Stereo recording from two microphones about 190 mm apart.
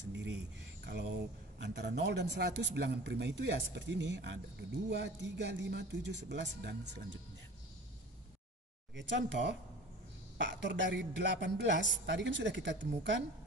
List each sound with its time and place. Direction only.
0.1 s a man's voice: 70° right (ahead or behind)
8.9 s a woman's voice: 70° right (ahead or behind)